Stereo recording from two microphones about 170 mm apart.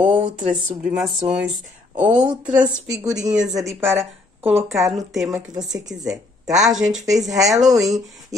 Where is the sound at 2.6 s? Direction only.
5° right (ahead or behind).